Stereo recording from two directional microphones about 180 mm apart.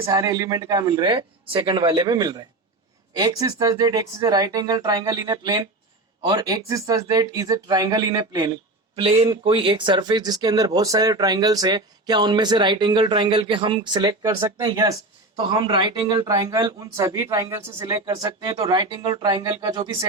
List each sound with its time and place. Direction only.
0.0 s speech: 20° right (ahead or behind)
9.0 s speech: 30° right (ahead or behind)